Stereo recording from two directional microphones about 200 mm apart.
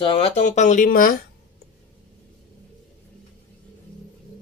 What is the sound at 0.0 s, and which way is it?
Speech, 30° left (ahead or behind).